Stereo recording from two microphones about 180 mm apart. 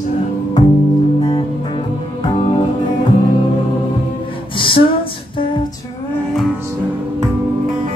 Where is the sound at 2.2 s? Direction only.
30° left (ahead or behind).